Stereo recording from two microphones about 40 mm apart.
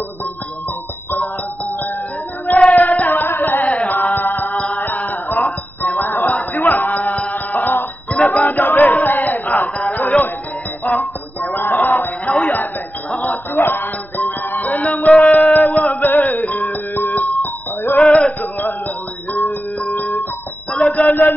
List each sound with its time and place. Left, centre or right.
2.4 s singing: left
3.6 s chant: left
4.7 s music: left
8.7 s a sound: left
9.9 s music: left
10.9 s a sound: left
13.6 s music: left
15.0 s a sound: centre
15.5 s music: left
17.9 s male singing: left
18.4 s music: left
20.8 s a sound: left